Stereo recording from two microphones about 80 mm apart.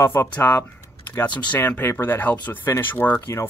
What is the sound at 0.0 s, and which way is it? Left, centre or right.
Speech, left.